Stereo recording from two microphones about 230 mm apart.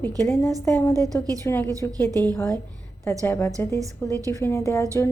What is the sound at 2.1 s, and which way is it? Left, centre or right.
Speech, centre.